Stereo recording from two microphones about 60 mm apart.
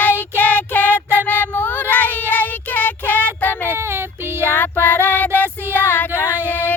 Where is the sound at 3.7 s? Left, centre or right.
Right.